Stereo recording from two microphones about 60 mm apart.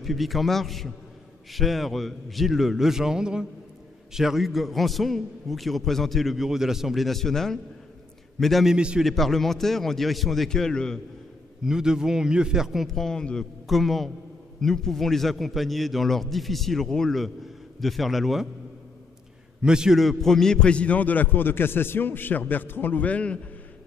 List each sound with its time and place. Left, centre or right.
0.0 s a man's voice: centre
8.7 s a man's voice: centre
9.0 s a man's voice: centre
11.6 s a man's voice: centre
12.8 s a man's voice: centre
13.7 s a man's voice: centre
19.6 s a man's voice: centre
20.0 s a man's voice: centre; by 23.4 s left